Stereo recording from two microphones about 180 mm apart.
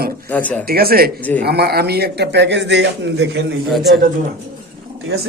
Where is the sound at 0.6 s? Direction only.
55° right (ahead or behind); by 3.6 s 85° right.